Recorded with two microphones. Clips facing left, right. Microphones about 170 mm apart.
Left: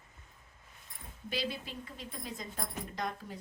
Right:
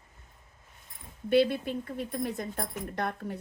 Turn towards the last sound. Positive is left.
turn(degrees=-60)  # may be behind; listen again after turning